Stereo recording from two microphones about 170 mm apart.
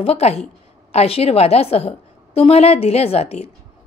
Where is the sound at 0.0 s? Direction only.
35° left (ahead or behind).